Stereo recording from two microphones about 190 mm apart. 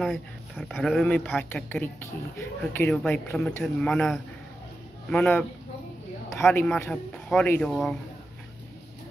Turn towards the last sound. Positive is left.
turn(degrees=0)  # may be behind; listen again after turning